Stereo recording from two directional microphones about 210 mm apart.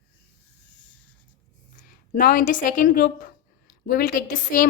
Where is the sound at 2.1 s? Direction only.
40° left (ahead or behind).